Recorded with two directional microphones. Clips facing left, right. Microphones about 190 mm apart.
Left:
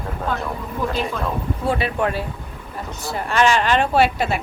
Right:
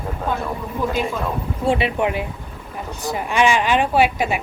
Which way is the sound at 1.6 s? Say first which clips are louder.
Right 4 dB; 25° right (ahead or behind).